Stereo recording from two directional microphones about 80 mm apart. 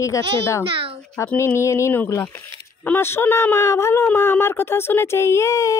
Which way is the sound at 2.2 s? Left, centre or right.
Left.